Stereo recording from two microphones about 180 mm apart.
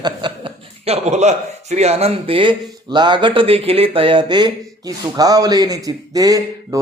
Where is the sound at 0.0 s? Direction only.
25° right (ahead or behind).